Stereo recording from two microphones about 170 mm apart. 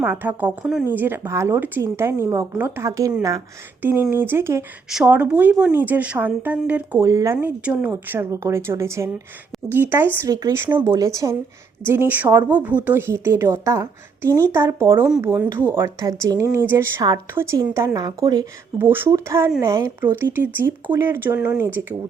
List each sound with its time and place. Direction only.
0.0 s speech: 10° right (ahead or behind)
7.3 s speech: 5° right (ahead or behind); by 18.4 s 20° right (ahead or behind)
18.8 s speech: 10° right (ahead or behind)